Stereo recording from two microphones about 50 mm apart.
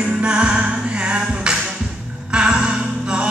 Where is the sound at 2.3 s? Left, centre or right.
Right.